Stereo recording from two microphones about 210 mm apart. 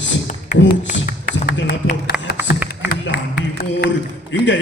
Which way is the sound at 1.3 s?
50° left (ahead or behind).